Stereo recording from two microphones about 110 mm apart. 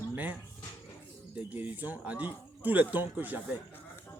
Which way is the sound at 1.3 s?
15° right (ahead or behind).